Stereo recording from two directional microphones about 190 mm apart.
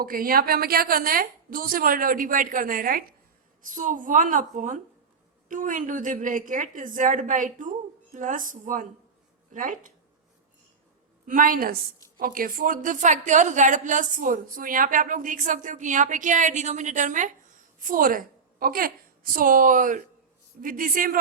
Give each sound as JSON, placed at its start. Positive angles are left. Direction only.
{"t": 0.0, "sound": "a woman's voice", "side_deg": -50}
{"t": 11.3, "sound": "a woman's voice", "side_deg": -45}